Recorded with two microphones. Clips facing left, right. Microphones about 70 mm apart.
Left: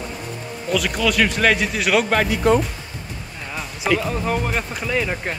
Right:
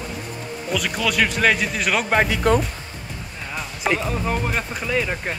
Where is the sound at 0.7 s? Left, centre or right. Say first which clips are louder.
Left 3 dB; centre.